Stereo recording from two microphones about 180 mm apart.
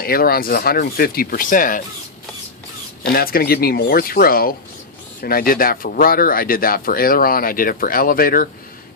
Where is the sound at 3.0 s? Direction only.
55° left (ahead or behind).